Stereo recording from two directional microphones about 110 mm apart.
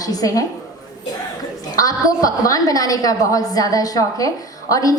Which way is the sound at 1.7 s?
30° left (ahead or behind).